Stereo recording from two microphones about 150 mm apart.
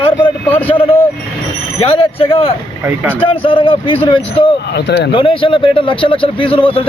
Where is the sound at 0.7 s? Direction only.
40° left (ahead or behind).